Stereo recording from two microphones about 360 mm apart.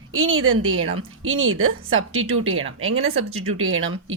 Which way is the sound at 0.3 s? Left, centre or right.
Right.